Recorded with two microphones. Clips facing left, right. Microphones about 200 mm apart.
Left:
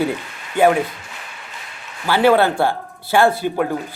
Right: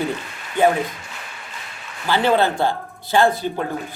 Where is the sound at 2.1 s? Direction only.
10° left (ahead or behind).